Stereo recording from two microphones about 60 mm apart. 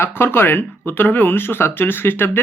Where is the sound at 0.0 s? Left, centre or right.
Left.